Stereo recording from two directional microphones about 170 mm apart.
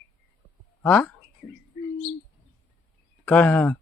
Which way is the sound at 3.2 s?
10° left (ahead or behind).